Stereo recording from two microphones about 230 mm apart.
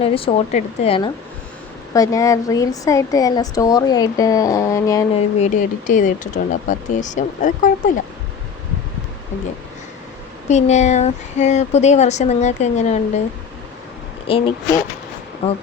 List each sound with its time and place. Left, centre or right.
0.0 s speech: left
5.1 s speech: left
10.5 s speech: left
14.3 s speech: left